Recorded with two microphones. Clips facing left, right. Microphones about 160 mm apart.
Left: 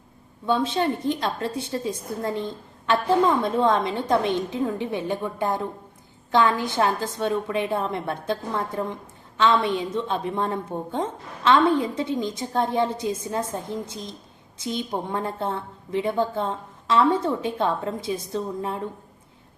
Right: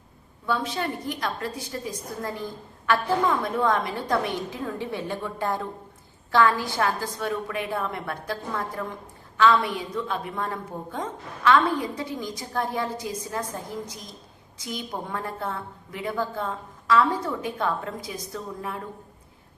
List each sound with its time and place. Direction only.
0.4 s a woman's voice: 25° left (ahead or behind)